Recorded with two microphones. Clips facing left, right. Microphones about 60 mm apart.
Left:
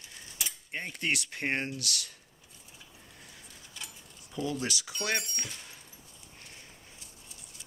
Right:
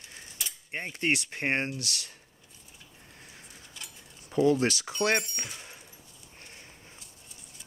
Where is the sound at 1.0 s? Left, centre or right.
Right.